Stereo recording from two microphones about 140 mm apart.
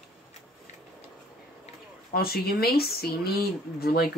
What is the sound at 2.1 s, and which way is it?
Speech, 90° left.